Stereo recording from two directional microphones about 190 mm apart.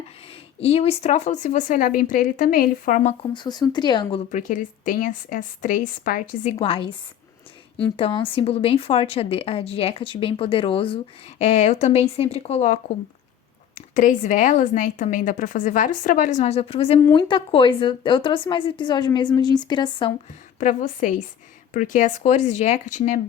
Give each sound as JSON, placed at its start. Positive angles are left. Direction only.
{"t": 0.6, "sound": "a woman's voice", "side_deg": 30}
{"t": 3.3, "sound": "a woman's voice", "side_deg": 20}
{"t": 4.3, "sound": "a woman's voice", "side_deg": 40}
{"t": 6.6, "sound": "a woman's voice", "side_deg": 30}
{"t": 7.9, "sound": "a woman's voice", "side_deg": 30}
{"t": 20.6, "sound": "a woman's voice", "side_deg": 40}